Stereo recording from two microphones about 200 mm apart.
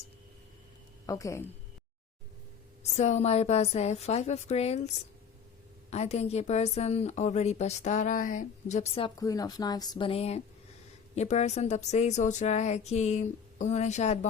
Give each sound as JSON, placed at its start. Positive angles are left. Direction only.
{"t": 1.0, "sound": "a woman's voice", "side_deg": 15}
{"t": 2.9, "sound": "a woman's voice", "side_deg": 35}
{"t": 5.9, "sound": "a woman's voice", "side_deg": 35}